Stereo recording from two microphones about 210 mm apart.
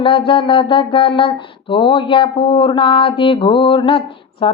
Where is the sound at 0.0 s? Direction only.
25° left (ahead or behind).